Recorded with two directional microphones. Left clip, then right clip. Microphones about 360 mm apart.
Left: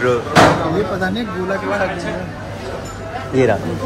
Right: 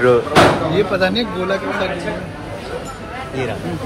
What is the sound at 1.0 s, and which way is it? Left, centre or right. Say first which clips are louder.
Speech: right 4 dB; centre.